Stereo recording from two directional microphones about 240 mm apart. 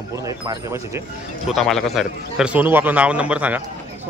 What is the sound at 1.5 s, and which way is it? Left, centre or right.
A man's voice, centre.